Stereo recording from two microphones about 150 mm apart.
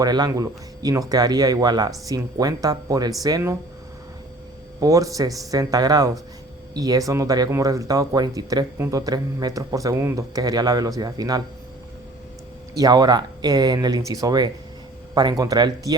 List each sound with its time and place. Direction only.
0.0 s speech: 25° right (ahead or behind)
4.8 s speech: 25° right (ahead or behind)
12.7 s speech: 25° right (ahead or behind)